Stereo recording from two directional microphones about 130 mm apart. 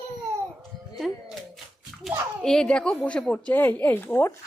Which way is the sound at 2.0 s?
5° left (ahead or behind).